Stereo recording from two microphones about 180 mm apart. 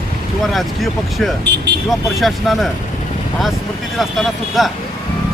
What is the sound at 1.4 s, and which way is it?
Speech, 70° right (ahead or behind).